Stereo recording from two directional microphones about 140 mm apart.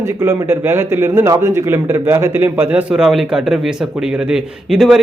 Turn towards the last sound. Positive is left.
turn(degrees=-5)  # may be behind; listen again after turning